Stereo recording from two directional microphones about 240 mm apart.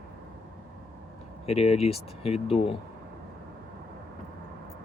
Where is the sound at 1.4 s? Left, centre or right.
Left.